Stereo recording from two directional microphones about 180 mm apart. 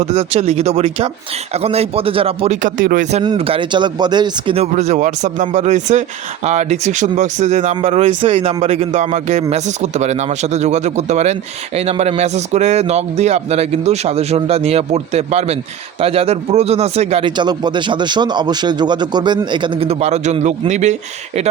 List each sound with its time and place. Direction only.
0.0 s speech: 35° right (ahead or behind)